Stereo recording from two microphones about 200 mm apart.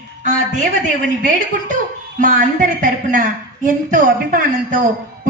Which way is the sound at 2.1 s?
40° right (ahead or behind).